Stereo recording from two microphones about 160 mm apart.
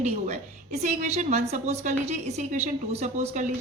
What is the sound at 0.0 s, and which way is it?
A woman's voice, 45° right (ahead or behind).